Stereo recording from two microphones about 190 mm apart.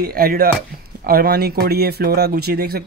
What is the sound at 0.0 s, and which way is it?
Speech, 50° right (ahead or behind).